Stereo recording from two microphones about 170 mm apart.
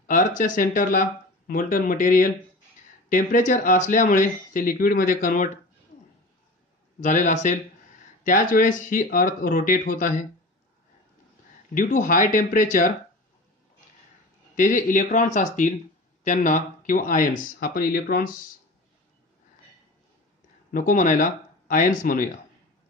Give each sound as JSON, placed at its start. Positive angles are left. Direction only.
{"t": 0.0, "sound": "speech", "side_deg": 50}
{"t": 7.0, "sound": "speech", "side_deg": 45}
{"t": 11.7, "sound": "speech", "side_deg": 50}
{"t": 14.5, "sound": "speech", "side_deg": 50}
{"t": 20.7, "sound": "speech", "side_deg": 50}